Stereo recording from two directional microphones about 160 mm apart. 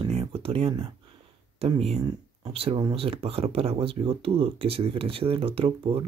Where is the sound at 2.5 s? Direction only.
35° right (ahead or behind).